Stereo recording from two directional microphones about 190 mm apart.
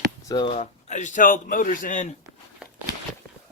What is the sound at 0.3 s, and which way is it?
A man's voice, 25° left (ahead or behind).